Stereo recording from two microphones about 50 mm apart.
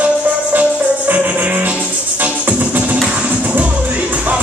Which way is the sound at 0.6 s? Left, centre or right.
Right.